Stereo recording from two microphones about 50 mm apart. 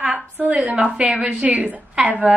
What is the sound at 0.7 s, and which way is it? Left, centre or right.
A woman's voice, centre.